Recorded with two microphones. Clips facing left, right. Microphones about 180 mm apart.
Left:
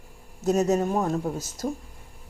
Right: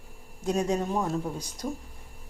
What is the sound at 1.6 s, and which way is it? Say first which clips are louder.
Speech: left 4 dB; 40° left (ahead or behind).